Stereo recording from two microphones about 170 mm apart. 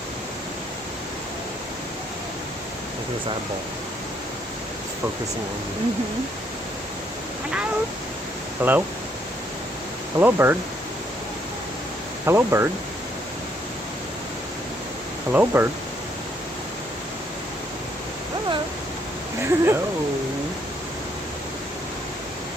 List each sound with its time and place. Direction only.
8.6 s speech: 10° right (ahead or behind)
10.2 s speech: 10° right (ahead or behind)
12.2 s speech: 15° right (ahead or behind)
15.3 s speech: 10° right (ahead or behind)
19.4 s speech: 15° right (ahead or behind)